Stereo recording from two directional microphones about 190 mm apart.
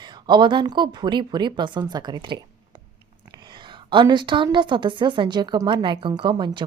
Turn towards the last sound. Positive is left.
turn(degrees=-25)  # may be behind; listen again after turning